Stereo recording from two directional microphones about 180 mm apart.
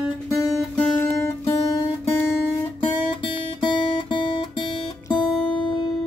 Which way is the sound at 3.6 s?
30° left (ahead or behind).